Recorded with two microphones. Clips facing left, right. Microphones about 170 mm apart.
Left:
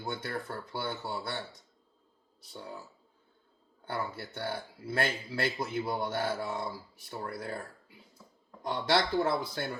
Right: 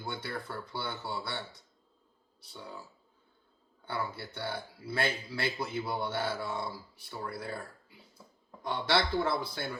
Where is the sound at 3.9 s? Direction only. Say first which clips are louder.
Left 1 dB; 45° left (ahead or behind).